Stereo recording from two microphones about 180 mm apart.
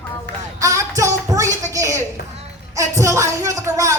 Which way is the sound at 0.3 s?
70° right (ahead or behind).